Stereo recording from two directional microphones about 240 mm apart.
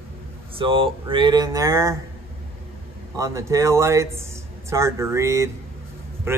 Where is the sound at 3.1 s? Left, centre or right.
Centre.